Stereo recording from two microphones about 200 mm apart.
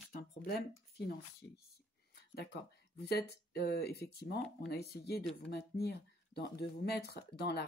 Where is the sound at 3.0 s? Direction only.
55° left (ahead or behind).